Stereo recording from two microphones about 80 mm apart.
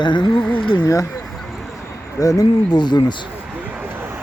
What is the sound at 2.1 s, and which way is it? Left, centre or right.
Speech, left.